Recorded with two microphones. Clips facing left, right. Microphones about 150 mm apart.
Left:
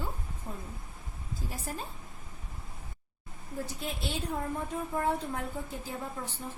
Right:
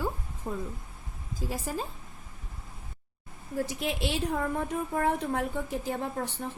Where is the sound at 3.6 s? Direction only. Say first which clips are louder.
Right 6 dB; 90° right.